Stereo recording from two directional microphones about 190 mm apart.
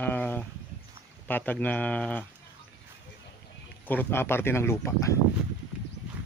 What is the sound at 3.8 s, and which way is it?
Speech, 10° left (ahead or behind).